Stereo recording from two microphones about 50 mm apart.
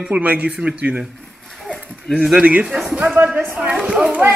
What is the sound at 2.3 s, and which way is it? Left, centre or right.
Speech, right.